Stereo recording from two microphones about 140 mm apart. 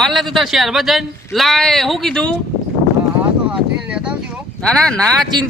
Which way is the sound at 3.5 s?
5° right (ahead or behind).